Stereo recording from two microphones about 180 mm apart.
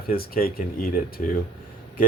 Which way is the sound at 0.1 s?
55° left (ahead or behind).